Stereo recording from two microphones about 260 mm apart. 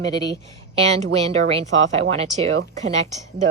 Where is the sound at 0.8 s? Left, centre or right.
Right.